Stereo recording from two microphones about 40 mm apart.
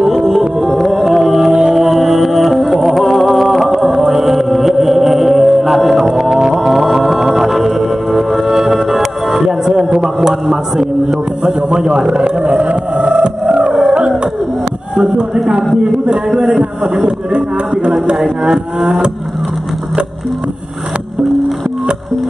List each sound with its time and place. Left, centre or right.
0.0 s music: centre
0.6 s music: centre
1.5 s music: centre
1.9 s music: centre
6.5 s mantra: centre
9.8 s a sound: centre
12.6 s music: right
13.8 s a sound: right
18.1 s a sound: centre